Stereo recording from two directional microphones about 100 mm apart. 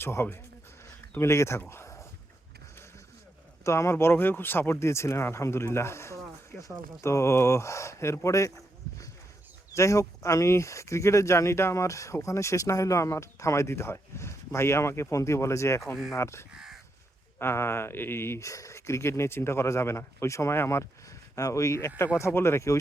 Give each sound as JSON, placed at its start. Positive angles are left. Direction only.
{"t": 0.0, "sound": "speech", "side_deg": 25}
{"t": 0.9, "sound": "a sound", "side_deg": 25}
{"t": 3.6, "sound": "speech", "side_deg": 30}
{"t": 9.7, "sound": "speech", "side_deg": 30}